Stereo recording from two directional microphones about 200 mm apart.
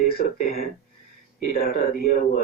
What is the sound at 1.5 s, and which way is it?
Speech, 45° left (ahead or behind).